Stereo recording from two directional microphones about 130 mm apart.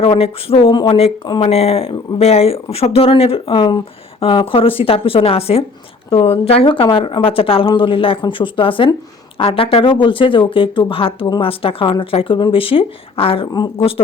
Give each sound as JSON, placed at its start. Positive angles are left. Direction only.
{"t": 0.0, "sound": "speech", "side_deg": 45}
{"t": 1.4, "sound": "speech", "side_deg": 55}